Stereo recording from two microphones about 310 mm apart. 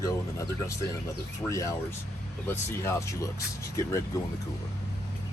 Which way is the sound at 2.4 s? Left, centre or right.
Centre.